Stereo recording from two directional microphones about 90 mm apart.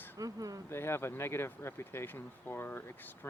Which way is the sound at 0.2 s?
40° right (ahead or behind).